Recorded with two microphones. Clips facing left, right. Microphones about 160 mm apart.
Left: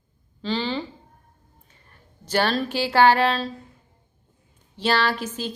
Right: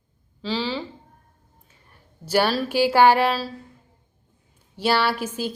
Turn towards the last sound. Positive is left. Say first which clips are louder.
# right 1 dB
turn(degrees=-10)  # may be behind; listen again after turning